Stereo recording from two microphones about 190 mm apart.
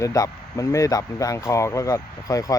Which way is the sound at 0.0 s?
15° left (ahead or behind).